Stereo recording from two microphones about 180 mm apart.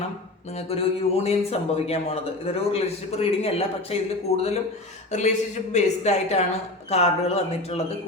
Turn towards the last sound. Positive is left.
turn(degrees=35)  # may be behind; listen again after turning